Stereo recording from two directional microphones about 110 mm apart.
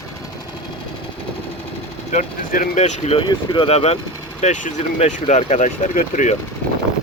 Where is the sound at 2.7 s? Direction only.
90° left.